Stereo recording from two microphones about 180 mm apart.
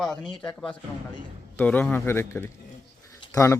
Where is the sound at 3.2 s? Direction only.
20° left (ahead or behind).